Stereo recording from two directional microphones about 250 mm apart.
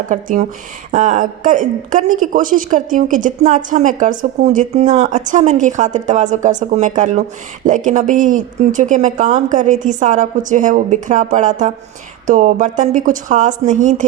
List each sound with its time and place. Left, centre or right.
0.1 s a woman's voice: right